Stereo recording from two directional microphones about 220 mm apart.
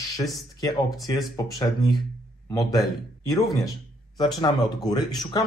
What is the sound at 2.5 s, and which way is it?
Speech, 15° left (ahead or behind).